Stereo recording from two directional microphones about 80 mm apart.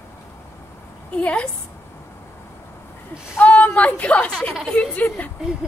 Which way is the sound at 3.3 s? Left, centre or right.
Left.